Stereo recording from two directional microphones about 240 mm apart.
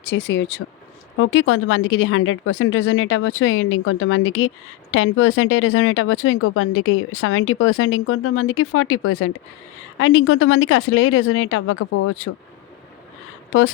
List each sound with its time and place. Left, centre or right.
0.0 s a woman's voice: left